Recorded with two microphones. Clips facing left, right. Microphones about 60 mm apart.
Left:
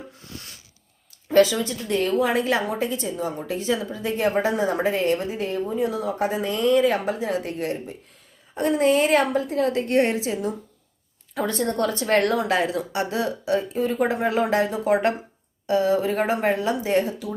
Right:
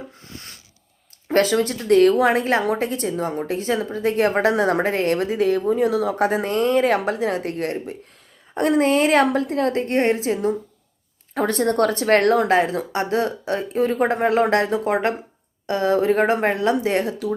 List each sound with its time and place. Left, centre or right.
1.3 s speech: right
2.3 s a woman's voice: right
4.5 s speech: right
6.4 s a woman's voice: right
6.9 s a woman's voice: right
14.8 s speech: right
15.6 s speech: right